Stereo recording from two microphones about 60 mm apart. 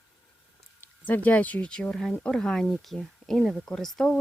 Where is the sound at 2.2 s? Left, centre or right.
Centre.